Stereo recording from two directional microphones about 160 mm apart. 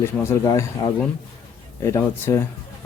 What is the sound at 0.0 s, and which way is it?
A man's voice, 15° left (ahead or behind).